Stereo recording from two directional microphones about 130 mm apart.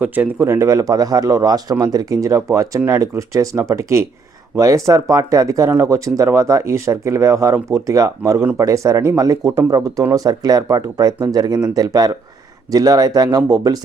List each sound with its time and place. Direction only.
0.0 s speech: 15° right (ahead or behind); by 13.7 s 30° right (ahead or behind)